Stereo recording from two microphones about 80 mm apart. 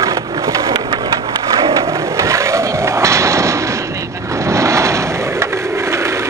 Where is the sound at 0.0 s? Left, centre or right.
Right.